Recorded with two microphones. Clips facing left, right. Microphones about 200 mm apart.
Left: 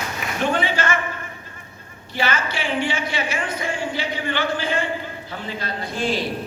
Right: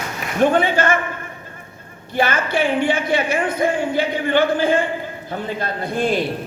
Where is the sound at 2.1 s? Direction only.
55° right (ahead or behind).